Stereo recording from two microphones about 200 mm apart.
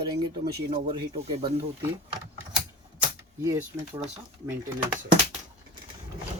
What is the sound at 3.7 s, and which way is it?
Speech, 5° right (ahead or behind).